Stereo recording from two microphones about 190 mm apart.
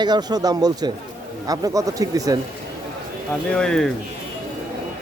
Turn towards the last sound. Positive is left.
turn(degrees=5)  # may be behind; listen again after turning